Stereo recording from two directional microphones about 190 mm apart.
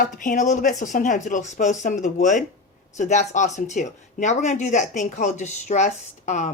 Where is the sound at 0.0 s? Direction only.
45° left (ahead or behind).